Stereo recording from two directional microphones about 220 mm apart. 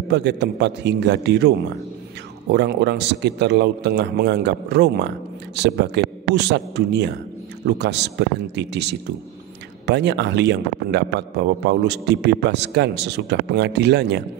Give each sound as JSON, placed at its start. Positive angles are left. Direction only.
{"t": 0.1, "sound": "a man's voice", "side_deg": -50}
{"t": 2.5, "sound": "a man's voice", "side_deg": -50}